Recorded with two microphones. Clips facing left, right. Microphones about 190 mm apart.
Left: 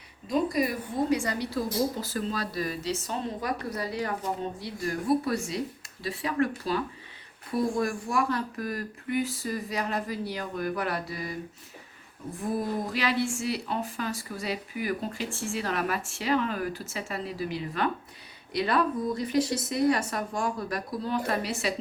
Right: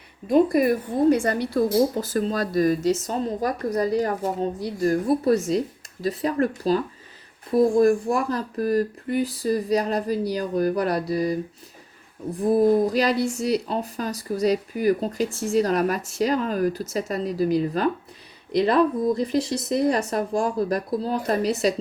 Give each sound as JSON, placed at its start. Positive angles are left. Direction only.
{"t": 0.3, "sound": "a woman's voice", "side_deg": -55}
{"t": 7.5, "sound": "a woman's voice", "side_deg": -45}
{"t": 19.2, "sound": "speech", "side_deg": -35}